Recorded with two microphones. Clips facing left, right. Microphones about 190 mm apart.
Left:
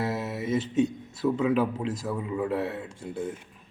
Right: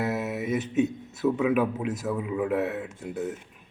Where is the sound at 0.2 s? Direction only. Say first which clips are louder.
Even; 20° right (ahead or behind).